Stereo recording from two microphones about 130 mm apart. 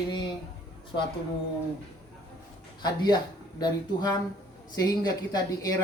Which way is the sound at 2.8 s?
30° left (ahead or behind).